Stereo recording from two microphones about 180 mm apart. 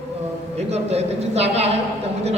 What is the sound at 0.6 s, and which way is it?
A man's voice, 35° right (ahead or behind).